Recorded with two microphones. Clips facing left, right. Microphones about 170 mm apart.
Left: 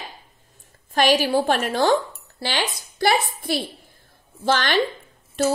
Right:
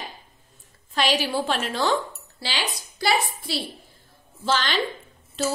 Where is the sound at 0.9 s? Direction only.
50° left (ahead or behind).